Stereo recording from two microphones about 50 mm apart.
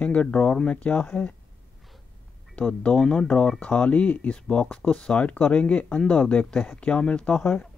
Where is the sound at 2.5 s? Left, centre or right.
Left.